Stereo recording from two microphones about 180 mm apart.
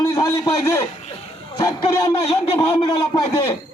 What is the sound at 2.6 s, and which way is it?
Speech, 30° left (ahead or behind).